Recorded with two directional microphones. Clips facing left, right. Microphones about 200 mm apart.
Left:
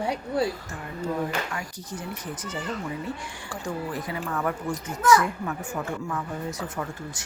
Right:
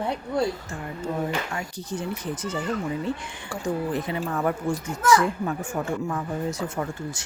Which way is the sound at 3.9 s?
25° right (ahead or behind).